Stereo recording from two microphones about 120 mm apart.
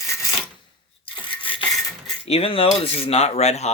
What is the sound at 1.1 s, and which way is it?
Rub, 45° left (ahead or behind).